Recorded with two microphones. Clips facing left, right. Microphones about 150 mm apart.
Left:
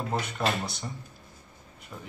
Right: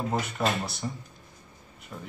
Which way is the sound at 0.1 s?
Centre (ahead or behind).